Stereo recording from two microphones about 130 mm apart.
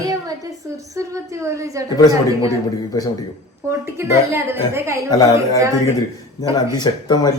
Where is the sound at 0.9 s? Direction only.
25° right (ahead or behind).